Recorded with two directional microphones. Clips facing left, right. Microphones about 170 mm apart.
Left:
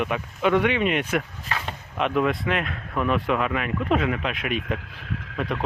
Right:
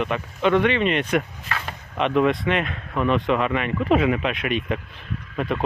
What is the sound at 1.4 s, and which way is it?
Speech, 20° left (ahead or behind).